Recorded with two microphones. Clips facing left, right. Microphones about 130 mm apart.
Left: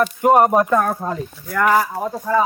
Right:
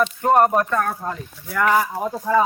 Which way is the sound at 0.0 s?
5° left (ahead or behind).